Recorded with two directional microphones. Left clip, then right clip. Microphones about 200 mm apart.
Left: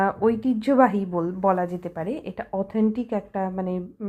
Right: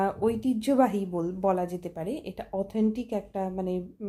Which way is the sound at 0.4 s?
10° left (ahead or behind).